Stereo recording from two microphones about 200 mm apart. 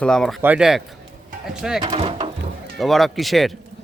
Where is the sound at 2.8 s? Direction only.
Centre (ahead or behind).